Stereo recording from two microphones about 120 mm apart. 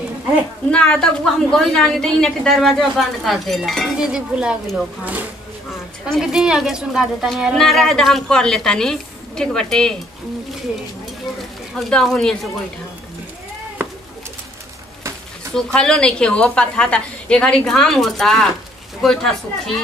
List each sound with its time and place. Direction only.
0.7 s a woman's voice: 10° left (ahead or behind)
11.7 s a woman's voice: 5° left (ahead or behind)
15.5 s a woman's voice: 5° left (ahead or behind)